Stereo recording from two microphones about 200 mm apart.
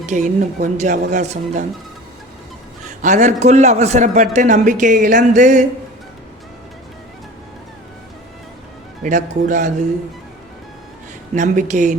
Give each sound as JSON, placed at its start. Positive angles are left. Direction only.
{"t": 0.0, "sound": "a man's voice", "side_deg": -35}
{"t": 3.0, "sound": "a man's voice", "side_deg": -35}
{"t": 9.0, "sound": "a man's voice", "side_deg": -40}
{"t": 11.3, "sound": "a man's voice", "side_deg": -35}